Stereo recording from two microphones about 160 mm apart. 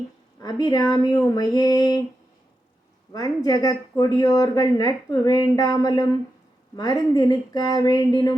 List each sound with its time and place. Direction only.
0.3 s speech: 25° left (ahead or behind)
3.1 s speech: 20° left (ahead or behind)